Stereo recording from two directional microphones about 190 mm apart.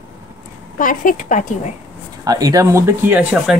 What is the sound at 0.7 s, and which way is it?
Speech, 45° left (ahead or behind).